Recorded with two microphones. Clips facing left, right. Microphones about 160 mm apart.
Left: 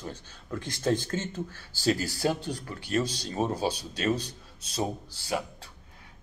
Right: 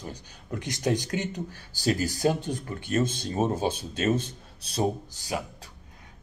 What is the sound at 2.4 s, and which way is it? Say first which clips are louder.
Speech: right 3 dB; 50° right (ahead or behind).